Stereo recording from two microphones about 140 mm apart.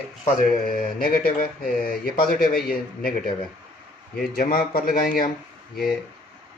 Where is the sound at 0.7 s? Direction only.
90° left.